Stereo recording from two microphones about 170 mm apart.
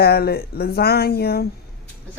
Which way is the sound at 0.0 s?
65° left (ahead or behind).